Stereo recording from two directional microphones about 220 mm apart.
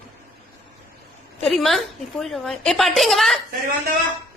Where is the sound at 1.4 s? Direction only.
Centre (ahead or behind).